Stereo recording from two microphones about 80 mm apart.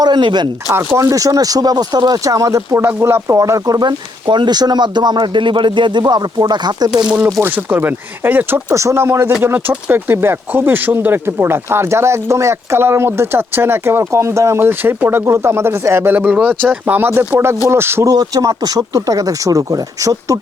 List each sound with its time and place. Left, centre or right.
0.0 s speech: right
0.7 s speech: right
2.8 s speech: right
3.8 s speech: right
7.4 s speech: right
8.7 s speech: right
16.1 s speech: right
18.0 s speech: right